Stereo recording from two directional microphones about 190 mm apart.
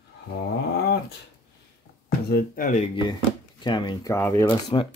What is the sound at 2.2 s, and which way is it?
Speech, 55° left (ahead or behind).